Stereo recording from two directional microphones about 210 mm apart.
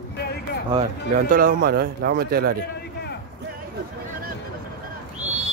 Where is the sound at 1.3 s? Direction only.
45° right (ahead or behind).